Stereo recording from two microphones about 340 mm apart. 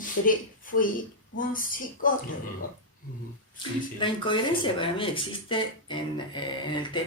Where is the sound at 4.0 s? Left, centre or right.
Centre.